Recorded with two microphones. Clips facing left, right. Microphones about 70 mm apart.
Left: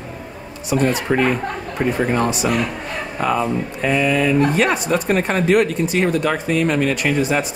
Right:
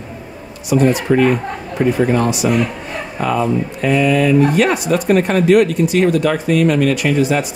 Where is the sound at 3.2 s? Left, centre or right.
Centre.